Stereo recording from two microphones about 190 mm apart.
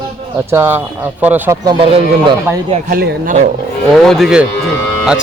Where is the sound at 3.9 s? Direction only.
Centre (ahead or behind).